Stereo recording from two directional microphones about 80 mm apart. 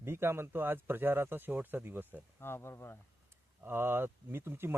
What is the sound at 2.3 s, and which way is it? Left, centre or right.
Speech, left.